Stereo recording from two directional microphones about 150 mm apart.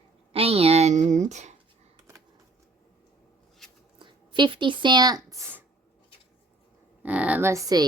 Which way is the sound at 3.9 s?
30° right (ahead or behind).